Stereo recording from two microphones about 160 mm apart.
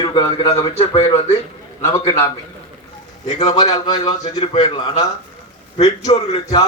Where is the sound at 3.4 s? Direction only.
40° left (ahead or behind).